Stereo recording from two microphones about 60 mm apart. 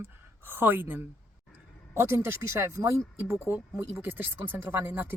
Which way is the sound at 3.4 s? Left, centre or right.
Right.